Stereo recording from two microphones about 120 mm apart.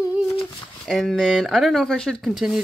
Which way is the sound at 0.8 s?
Centre (ahead or behind).